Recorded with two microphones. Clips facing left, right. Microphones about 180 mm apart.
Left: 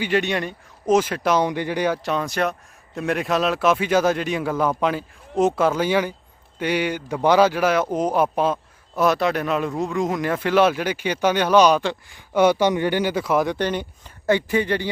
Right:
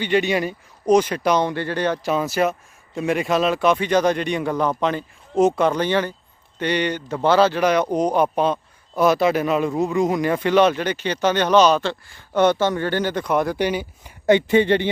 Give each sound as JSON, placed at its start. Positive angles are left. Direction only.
{"t": 0.0, "sound": "speech", "side_deg": 0}
{"t": 1.5, "sound": "speech", "side_deg": 15}
{"t": 2.0, "sound": "speech", "side_deg": -5}
{"t": 13.6, "sound": "speech", "side_deg": -10}
{"t": 14.3, "sound": "speech", "side_deg": -25}